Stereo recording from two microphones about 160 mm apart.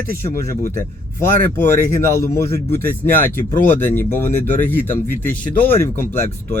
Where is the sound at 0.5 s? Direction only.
55° left (ahead or behind).